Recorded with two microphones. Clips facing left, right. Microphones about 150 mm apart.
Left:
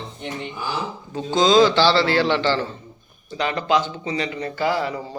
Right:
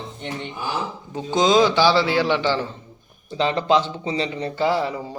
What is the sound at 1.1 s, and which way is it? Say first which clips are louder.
A man's voice: left 1 dB; 20° right (ahead or behind).